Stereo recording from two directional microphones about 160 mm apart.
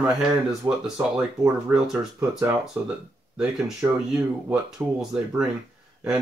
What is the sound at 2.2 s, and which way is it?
Speech, 15° right (ahead or behind).